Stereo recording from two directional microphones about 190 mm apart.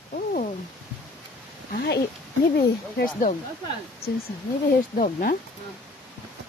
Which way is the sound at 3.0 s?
45° left (ahead or behind).